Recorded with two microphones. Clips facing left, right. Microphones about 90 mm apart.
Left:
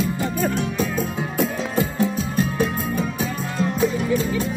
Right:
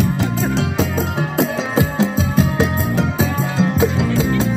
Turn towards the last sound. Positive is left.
turn(degrees=-90)